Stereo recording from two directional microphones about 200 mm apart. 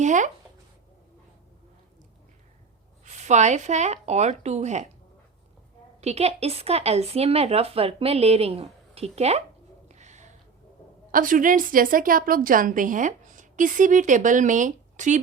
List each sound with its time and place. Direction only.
0.0 s speech: 40° right (ahead or behind)
3.0 s speech: 35° right (ahead or behind)
6.0 s a woman's voice: 30° right (ahead or behind)
9.9 s a sound: 35° right (ahead or behind)
11.1 s a woman's voice: 40° right (ahead or behind)